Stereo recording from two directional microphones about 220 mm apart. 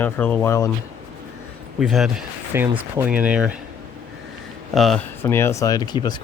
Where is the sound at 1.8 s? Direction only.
Centre (ahead or behind).